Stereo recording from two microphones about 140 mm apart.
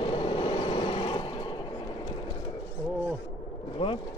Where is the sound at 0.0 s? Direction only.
35° left (ahead or behind).